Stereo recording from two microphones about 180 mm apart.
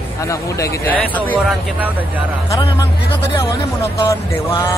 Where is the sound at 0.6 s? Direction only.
10° left (ahead or behind).